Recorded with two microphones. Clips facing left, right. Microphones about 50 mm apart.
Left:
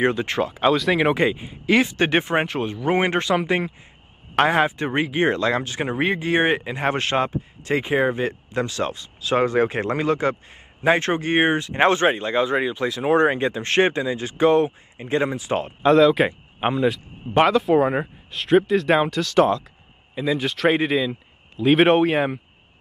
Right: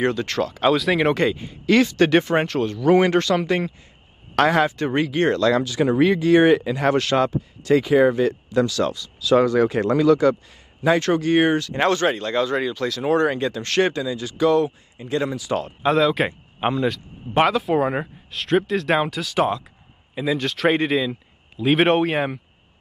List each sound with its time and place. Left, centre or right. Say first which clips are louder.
0.0 s speech: left 1 dB; left
0.6 s speech: even; centre
1.1 s speech: even; centre
4.4 s speech: right 1 dB; left
15.8 s speech: left 4 dB; centre
20.3 s speech: even; centre